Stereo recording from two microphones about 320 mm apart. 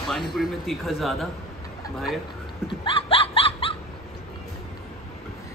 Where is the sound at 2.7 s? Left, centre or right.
Centre.